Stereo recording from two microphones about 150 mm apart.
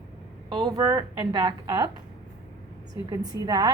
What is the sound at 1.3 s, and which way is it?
Speech, 30° right (ahead or behind).